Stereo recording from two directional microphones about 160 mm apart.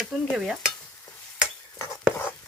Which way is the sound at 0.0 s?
Centre (ahead or behind).